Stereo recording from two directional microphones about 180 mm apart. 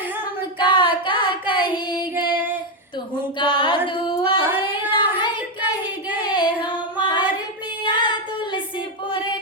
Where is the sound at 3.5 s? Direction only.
25° left (ahead or behind).